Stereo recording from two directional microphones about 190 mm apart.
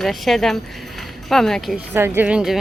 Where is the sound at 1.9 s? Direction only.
10° right (ahead or behind).